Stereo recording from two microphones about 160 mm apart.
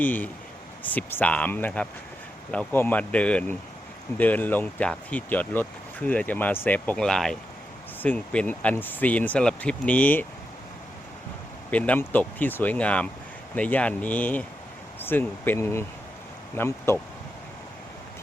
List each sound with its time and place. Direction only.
0.0 s speech: 10° left (ahead or behind)
11.7 s speech: 10° left (ahead or behind)